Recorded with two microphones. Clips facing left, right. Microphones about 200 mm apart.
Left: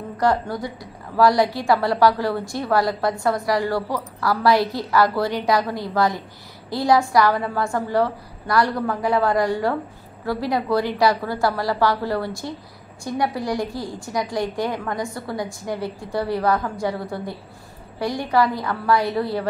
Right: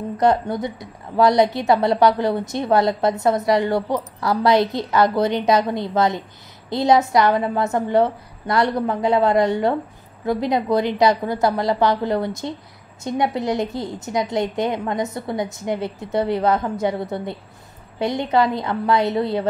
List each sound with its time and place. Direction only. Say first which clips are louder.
0.2 s a woman's voice: right 3 dB; 20° right (ahead or behind)